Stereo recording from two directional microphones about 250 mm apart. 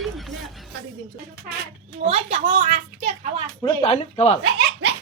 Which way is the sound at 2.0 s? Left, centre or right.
Right.